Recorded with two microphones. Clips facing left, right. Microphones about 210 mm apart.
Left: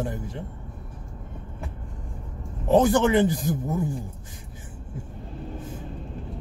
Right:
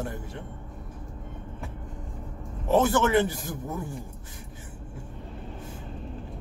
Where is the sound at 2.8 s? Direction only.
20° left (ahead or behind).